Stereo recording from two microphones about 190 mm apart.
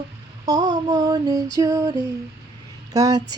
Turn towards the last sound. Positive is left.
turn(degrees=-20)  # may be behind; listen again after turning